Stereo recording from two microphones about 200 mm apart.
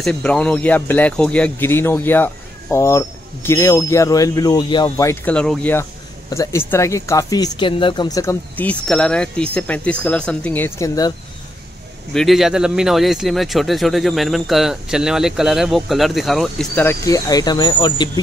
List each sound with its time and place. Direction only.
0.0 s speech: 5° left (ahead or behind)
12.1 s speech: centre (ahead or behind); by 18.2 s 20° left (ahead or behind)